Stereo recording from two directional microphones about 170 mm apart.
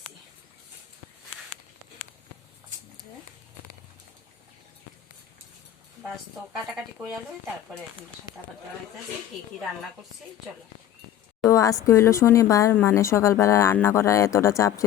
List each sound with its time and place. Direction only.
6.7 s speech: centre (ahead or behind)
11.3 s speech: 20° left (ahead or behind)